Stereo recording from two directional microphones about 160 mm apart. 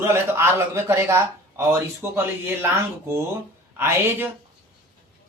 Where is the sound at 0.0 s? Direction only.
15° right (ahead or behind).